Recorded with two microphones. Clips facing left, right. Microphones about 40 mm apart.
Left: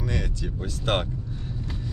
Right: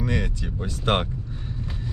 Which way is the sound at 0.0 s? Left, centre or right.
Centre.